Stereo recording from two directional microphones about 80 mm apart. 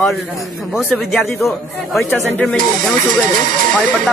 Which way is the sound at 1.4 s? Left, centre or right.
Centre.